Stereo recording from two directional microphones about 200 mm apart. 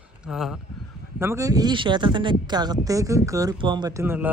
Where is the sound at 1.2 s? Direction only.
15° right (ahead or behind).